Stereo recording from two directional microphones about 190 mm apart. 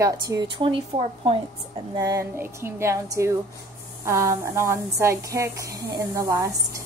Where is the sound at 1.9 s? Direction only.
20° right (ahead or behind).